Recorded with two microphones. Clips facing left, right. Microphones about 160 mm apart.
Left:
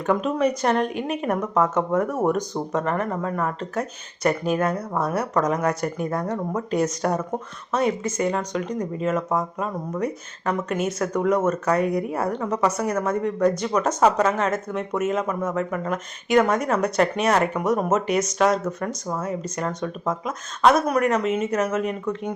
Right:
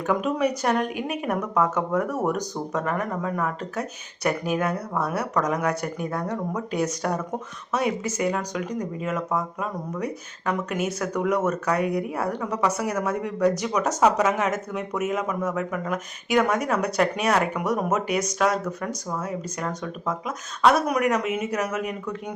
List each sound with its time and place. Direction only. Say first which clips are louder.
0.0 s speech: left 2 dB; 5° right (ahead or behind)
14.3 s speech: left 2 dB; 15° right (ahead or behind)
14.8 s speech: left 4 dB; centre (ahead or behind)
20.8 s speech: left 2 dB; 15° right (ahead or behind)
21.5 s speech: left 4 dB; centre (ahead or behind)